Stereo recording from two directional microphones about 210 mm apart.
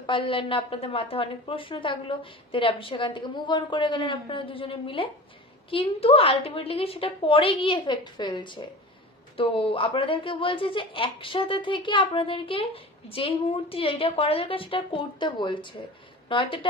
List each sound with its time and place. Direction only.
0.0 s a woman's voice: 25° left (ahead or behind)